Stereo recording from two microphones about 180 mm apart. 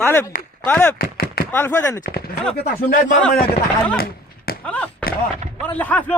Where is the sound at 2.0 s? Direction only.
55° left (ahead or behind).